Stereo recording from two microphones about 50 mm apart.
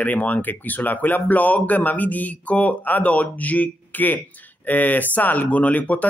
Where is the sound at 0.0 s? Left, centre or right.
Left.